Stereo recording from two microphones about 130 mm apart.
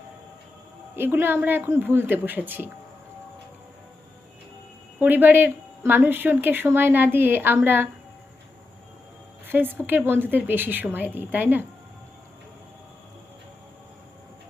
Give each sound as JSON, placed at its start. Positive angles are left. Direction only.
{"t": 0.9, "sound": "speech", "side_deg": -15}
{"t": 4.9, "sound": "speech", "side_deg": -15}
{"t": 9.5, "sound": "a woman's voice", "side_deg": -15}